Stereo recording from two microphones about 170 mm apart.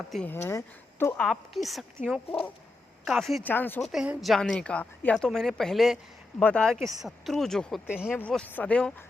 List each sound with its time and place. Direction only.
0.1 s a woman's voice: 5° left (ahead or behind)
0.4 s a woman's voice: 15° left (ahead or behind); by 1.8 s centre (ahead or behind)
2.0 s speech: 40° left (ahead or behind)
3.1 s a woman's voice: centre (ahead or behind)
3.5 s speech: 10° left (ahead or behind)
3.9 s a woman's voice: 5° right (ahead or behind)
8.1 s speech: 5° left (ahead or behind)